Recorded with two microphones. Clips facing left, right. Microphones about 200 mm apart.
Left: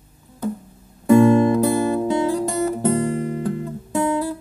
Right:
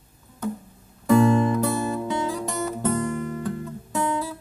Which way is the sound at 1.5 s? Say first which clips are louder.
Left 6 dB; 30° left (ahead or behind).